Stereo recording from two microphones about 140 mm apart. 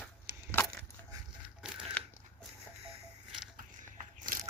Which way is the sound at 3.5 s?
70° right (ahead or behind).